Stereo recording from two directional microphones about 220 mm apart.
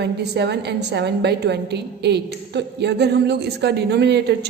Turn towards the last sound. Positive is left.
turn(degrees=-50)  # may be behind; listen again after turning